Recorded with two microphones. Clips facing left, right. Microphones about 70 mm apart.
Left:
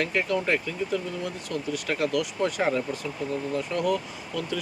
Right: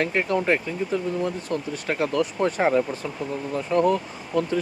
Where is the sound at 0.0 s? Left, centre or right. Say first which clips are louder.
Right 3 dB; right.